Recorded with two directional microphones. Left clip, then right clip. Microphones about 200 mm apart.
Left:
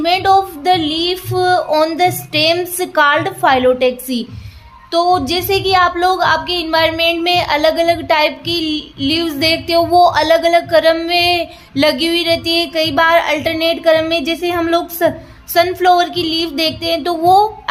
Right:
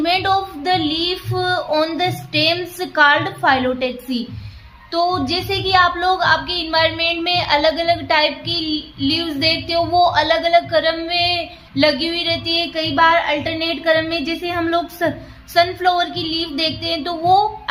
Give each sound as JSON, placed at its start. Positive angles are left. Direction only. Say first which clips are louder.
{"t": 0.0, "sound": "speech", "louder": "left 5 dB", "side_deg": 25}